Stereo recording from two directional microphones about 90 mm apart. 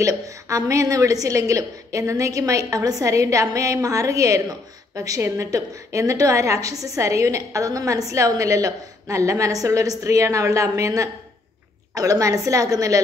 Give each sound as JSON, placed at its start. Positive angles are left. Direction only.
{"t": 0.0, "sound": "a woman's voice", "side_deg": -40}